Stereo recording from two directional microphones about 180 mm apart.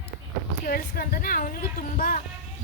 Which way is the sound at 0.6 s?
55° left (ahead or behind).